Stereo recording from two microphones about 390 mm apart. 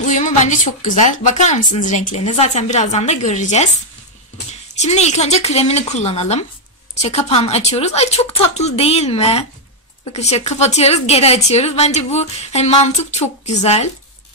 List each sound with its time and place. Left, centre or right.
0.0 s a woman's voice: centre
4.7 s a woman's voice: centre